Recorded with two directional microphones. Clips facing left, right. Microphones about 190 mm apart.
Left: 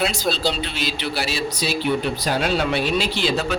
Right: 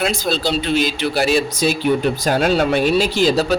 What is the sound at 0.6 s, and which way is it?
A man's voice, 45° right (ahead or behind).